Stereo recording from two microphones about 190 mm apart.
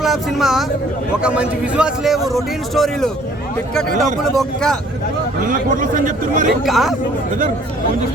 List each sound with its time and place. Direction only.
0.0 s a man's voice: centre (ahead or behind)
4.2 s a man's voice: centre (ahead or behind)
5.5 s speech: 45° right (ahead or behind)
6.7 s a man's voice: centre (ahead or behind)